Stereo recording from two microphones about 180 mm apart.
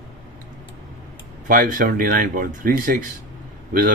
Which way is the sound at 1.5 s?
50° right (ahead or behind).